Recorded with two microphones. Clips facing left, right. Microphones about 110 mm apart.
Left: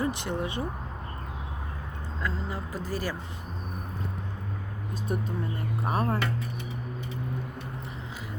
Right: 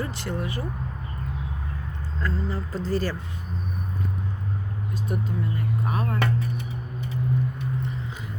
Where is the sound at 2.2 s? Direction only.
15° left (ahead or behind).